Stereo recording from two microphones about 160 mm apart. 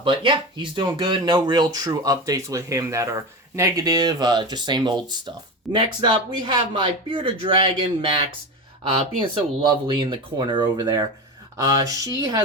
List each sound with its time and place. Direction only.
0.0 s speech: 30° right (ahead or behind)